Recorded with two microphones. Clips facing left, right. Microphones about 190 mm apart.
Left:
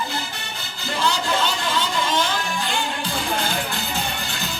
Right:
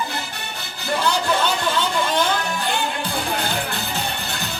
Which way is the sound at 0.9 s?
60° right (ahead or behind).